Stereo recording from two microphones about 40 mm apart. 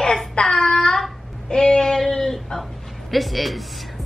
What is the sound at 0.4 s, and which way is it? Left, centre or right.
Child singing, centre.